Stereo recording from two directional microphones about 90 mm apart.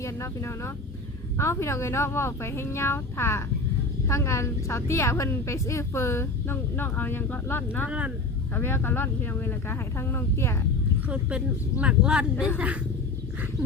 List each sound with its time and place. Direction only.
0.0 s a woman's voice: 30° left (ahead or behind)
7.9 s speech: 15° right (ahead or behind)
8.5 s a woman's voice: 25° left (ahead or behind)
11.1 s speech: 10° right (ahead or behind)
13.6 s roaring cats: 10° right (ahead or behind)